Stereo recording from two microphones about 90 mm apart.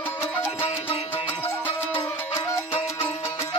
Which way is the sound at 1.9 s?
25° left (ahead or behind).